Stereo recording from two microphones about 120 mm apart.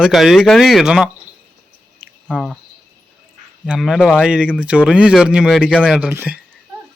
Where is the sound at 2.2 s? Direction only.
5° left (ahead or behind).